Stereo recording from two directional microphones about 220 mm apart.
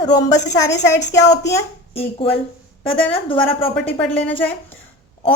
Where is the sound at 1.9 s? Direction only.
25° left (ahead or behind).